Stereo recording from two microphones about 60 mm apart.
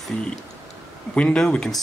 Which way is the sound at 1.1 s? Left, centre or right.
Centre.